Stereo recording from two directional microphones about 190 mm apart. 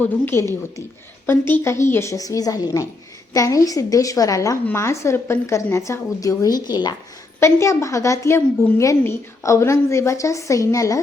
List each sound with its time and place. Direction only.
0.0 s a woman's voice: 10° left (ahead or behind)
1.6 s a woman's voice: 15° left (ahead or behind)